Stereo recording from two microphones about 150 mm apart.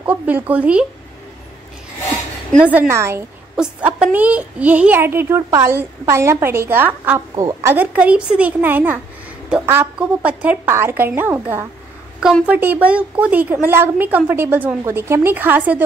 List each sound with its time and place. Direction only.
0.0 s a woman's voice: 10° right (ahead or behind)
2.6 s a woman's voice: 10° right (ahead or behind)
12.2 s a woman's voice: 5° right (ahead or behind)